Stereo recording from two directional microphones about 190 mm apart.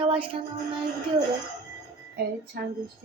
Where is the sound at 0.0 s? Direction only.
25° right (ahead or behind).